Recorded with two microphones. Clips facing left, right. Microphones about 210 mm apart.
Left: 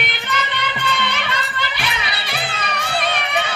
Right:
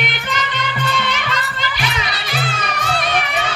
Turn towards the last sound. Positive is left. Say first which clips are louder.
# right 1 dB
turn(degrees=60)  # may be behind; listen again after turning